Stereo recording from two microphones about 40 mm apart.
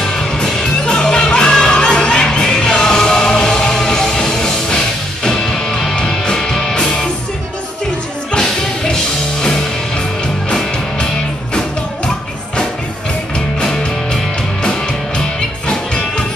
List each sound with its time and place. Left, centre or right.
0.5 s music: centre
8.3 s music: centre
10.5 s music: centre
13.6 s music: centre